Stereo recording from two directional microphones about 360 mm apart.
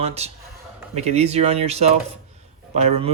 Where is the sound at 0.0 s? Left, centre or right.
Centre.